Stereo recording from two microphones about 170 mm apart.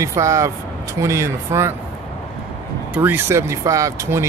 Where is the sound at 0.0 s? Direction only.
15° right (ahead or behind).